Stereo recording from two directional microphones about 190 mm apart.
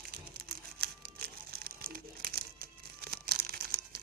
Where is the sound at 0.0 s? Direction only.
55° right (ahead or behind).